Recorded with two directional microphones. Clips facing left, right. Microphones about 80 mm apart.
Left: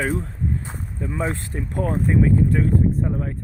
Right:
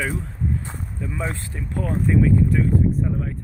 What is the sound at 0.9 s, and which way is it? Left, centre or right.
Speech, left.